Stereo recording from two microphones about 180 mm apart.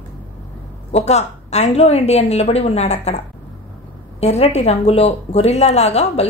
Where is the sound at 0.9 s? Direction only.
35° left (ahead or behind).